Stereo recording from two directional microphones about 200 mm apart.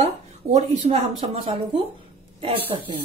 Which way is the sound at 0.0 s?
35° right (ahead or behind).